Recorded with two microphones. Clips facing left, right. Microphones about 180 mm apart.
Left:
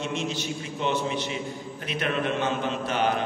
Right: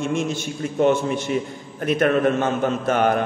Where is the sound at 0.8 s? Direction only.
50° right (ahead or behind).